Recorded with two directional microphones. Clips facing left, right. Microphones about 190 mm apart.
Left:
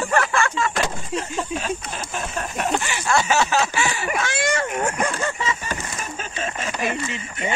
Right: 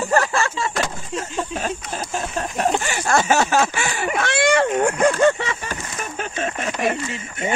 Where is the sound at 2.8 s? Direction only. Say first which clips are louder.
Right 2 dB; 45° right (ahead or behind).